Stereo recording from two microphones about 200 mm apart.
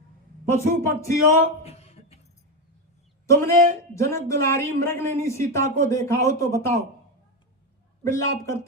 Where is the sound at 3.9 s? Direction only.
15° left (ahead or behind).